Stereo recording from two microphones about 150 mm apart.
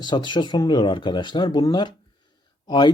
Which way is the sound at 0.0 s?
30° left (ahead or behind).